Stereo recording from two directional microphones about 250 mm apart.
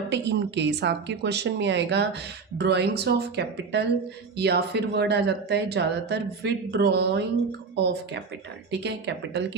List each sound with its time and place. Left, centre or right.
0.1 s speech: right